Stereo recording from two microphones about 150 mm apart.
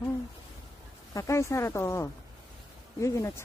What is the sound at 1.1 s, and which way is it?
Speech, 20° left (ahead or behind).